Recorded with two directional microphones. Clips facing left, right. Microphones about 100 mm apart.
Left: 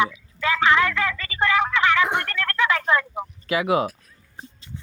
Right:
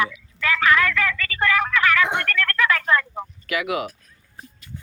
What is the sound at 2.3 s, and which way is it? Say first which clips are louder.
Speech: right 1 dB; 20° left (ahead or behind).